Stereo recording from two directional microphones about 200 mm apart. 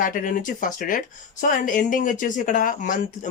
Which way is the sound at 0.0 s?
40° left (ahead or behind).